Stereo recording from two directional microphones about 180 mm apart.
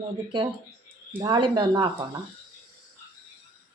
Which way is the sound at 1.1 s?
25° right (ahead or behind).